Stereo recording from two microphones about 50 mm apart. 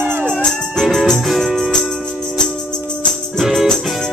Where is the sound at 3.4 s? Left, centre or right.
Centre.